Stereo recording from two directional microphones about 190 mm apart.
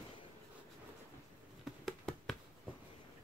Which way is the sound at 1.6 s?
Centre (ahead or behind).